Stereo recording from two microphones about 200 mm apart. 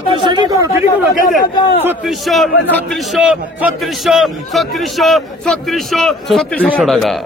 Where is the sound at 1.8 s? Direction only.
Centre (ahead or behind).